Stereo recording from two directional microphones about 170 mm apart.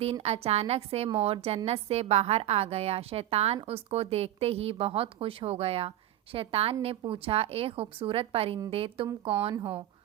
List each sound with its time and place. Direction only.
0.0 s a woman's voice: 35° right (ahead or behind)